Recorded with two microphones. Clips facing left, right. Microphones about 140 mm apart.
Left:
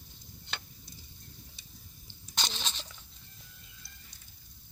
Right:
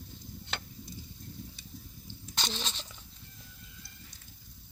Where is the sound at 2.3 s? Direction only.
Centre (ahead or behind).